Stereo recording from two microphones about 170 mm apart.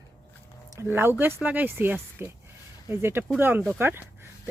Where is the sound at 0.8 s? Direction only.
15° right (ahead or behind).